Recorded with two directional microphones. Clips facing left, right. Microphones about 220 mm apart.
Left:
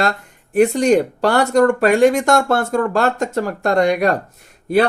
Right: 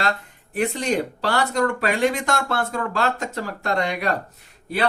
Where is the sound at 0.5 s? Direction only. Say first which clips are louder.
Left 9 dB; 45° left (ahead or behind).